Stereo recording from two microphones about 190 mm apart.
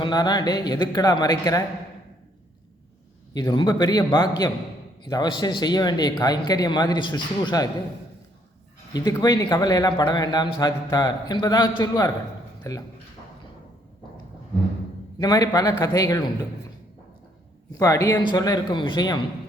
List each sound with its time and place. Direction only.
0.0 s a man's voice: 20° left (ahead or behind)
3.3 s a man's voice: 25° left (ahead or behind)
8.9 s a man's voice: 20° left (ahead or behind)
15.2 s a man's voice: 20° left (ahead or behind)
17.7 s a man's voice: 15° left (ahead or behind)